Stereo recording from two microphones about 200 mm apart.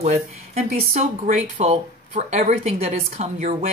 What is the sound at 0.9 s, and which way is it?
Speech, 30° right (ahead or behind).